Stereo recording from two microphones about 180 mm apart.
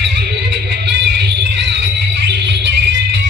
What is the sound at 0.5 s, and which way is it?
Music, 75° right (ahead or behind).